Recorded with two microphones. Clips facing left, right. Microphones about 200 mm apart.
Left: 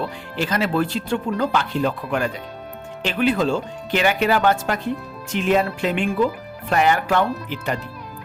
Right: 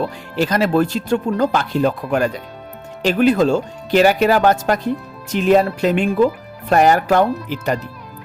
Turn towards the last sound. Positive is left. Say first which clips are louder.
# right 5 dB
turn(degrees=-40)  # may be behind; listen again after turning